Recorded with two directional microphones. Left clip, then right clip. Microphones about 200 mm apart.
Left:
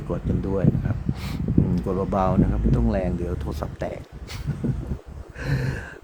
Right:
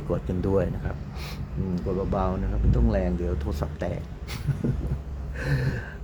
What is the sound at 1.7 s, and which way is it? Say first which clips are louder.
Speech: even; 15° left (ahead or behind).